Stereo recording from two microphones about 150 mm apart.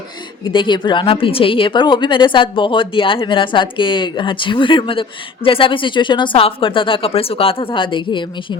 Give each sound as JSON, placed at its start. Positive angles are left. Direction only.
{"t": 0.4, "sound": "a woman's voice", "side_deg": 30}